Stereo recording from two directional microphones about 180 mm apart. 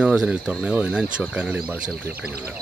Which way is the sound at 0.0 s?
5° right (ahead or behind).